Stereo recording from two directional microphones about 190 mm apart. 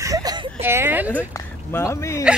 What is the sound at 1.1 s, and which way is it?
Speech, 15° left (ahead or behind).